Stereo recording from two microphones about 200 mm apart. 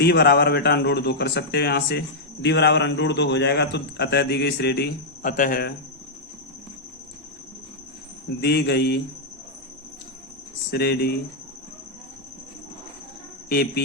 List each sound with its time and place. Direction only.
0.0 s a man's voice: 55° left (ahead or behind)
8.4 s speech: 55° left (ahead or behind)
10.7 s speech: 55° left (ahead or behind)
13.5 s speech: 50° left (ahead or behind)